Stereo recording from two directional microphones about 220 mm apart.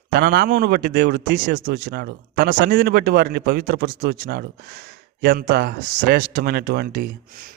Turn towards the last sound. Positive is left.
turn(degrees=-45)  # may be behind; listen again after turning